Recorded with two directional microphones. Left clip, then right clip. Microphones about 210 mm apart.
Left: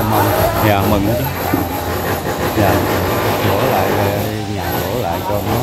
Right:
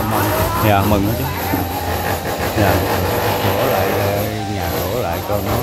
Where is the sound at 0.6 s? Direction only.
15° right (ahead or behind).